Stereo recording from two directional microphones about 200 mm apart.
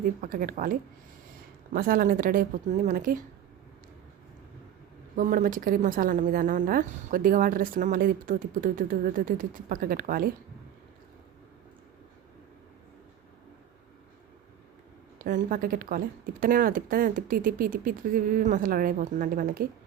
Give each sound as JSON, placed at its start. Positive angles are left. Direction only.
{"t": 0.2, "sound": "speech", "side_deg": -45}
{"t": 5.1, "sound": "speech", "side_deg": -40}
{"t": 15.2, "sound": "speech", "side_deg": -45}